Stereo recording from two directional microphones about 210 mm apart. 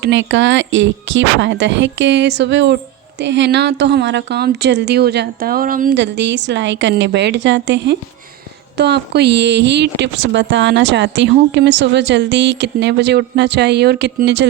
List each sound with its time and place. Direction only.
0.0 s speech: 60° right (ahead or behind); by 6.0 s 40° right (ahead or behind)
6.0 s speech: 55° right (ahead or behind)